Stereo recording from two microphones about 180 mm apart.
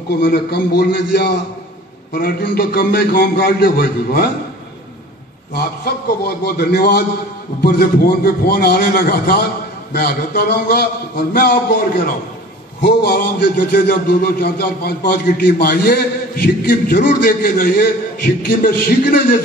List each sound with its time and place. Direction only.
0.2 s a man's voice: 55° left (ahead or behind)
5.9 s a man's voice: 60° left (ahead or behind)
12.8 s a man's voice: 65° left (ahead or behind)